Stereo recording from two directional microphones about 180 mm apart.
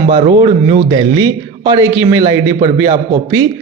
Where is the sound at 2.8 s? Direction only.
20° right (ahead or behind).